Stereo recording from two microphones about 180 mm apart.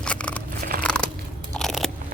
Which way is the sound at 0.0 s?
5° left (ahead or behind).